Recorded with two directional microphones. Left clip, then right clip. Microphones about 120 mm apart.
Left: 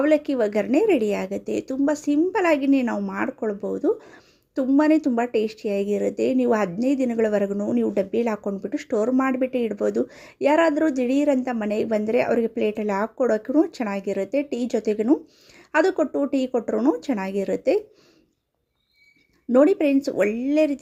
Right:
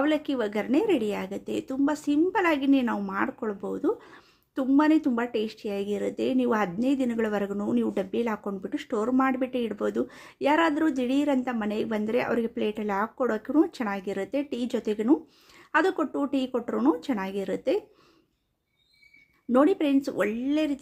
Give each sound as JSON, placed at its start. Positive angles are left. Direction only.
{"t": 0.0, "sound": "a woman's voice", "side_deg": 30}
{"t": 8.1, "sound": "a woman's voice", "side_deg": 30}
{"t": 19.5, "sound": "a woman's voice", "side_deg": 30}